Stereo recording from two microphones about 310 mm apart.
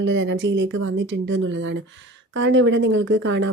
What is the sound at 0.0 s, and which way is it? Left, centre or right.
Speech, right.